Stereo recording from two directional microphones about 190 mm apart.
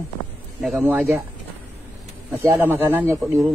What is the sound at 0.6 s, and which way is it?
Speech, centre (ahead or behind).